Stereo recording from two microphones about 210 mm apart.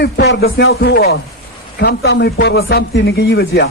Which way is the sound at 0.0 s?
50° left (ahead or behind).